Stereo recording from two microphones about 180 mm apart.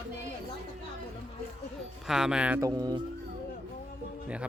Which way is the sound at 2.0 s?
5° right (ahead or behind).